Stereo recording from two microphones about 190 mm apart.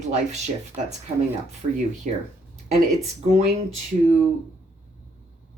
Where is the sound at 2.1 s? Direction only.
40° right (ahead or behind).